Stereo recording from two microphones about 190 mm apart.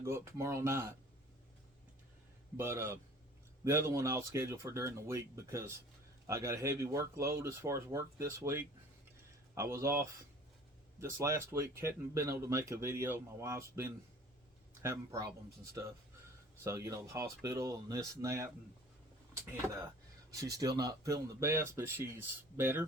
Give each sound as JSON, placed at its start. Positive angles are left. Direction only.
{"t": 0.0, "sound": "speech", "side_deg": -15}
{"t": 2.6, "sound": "speech", "side_deg": -15}
{"t": 16.6, "sound": "speech", "side_deg": -15}